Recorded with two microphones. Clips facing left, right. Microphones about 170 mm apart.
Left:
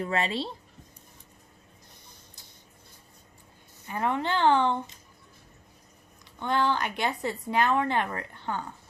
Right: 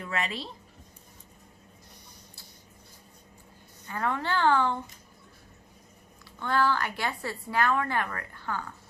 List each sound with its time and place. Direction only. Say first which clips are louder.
0.0 s a woman's voice: left 5 dB; 30° left (ahead or behind)
3.8 s a woman's voice: left 2 dB; 20° left (ahead or behind)
6.4 s a woman's voice: even; 20° left (ahead or behind)